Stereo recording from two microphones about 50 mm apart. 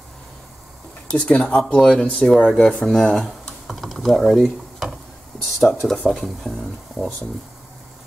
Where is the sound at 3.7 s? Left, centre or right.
Centre.